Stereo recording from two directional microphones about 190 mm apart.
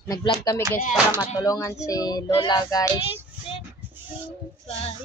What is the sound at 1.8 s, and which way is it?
Child singing, 20° left (ahead or behind).